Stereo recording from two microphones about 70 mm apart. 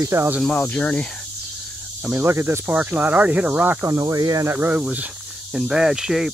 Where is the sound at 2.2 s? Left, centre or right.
Right.